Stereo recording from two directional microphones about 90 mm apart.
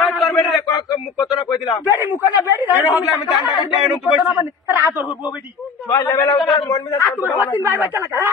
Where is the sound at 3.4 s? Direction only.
55° left (ahead or behind).